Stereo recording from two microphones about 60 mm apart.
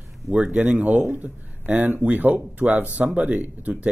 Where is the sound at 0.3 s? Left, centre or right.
Right.